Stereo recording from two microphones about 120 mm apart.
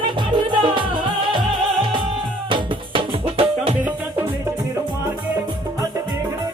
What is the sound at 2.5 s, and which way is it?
Music, 50° right (ahead or behind).